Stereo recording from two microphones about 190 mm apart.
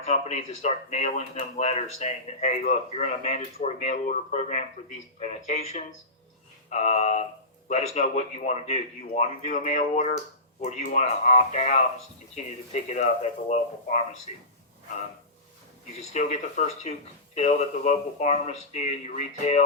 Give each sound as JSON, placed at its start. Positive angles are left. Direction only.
{"t": 0.0, "sound": "speech", "side_deg": 35}
{"t": 16.1, "sound": "speech", "side_deg": 35}